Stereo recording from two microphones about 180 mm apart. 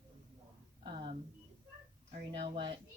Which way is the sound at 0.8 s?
30° right (ahead or behind).